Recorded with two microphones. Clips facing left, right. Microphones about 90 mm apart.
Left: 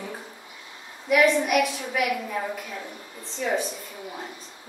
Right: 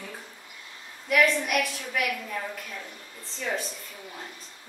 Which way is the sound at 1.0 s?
5° left (ahead or behind).